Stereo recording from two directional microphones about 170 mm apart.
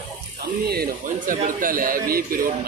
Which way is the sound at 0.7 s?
60° right (ahead or behind).